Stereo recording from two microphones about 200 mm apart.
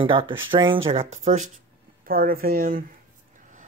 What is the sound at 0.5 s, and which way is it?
Speech, 25° right (ahead or behind).